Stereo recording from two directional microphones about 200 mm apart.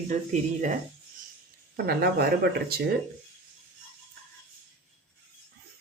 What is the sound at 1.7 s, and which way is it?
Speech, 50° right (ahead or behind).